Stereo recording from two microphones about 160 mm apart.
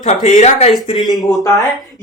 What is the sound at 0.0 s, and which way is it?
Speech, 45° left (ahead or behind).